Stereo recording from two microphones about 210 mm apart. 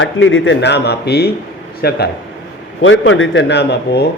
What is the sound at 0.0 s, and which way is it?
A man's voice, 65° left (ahead or behind).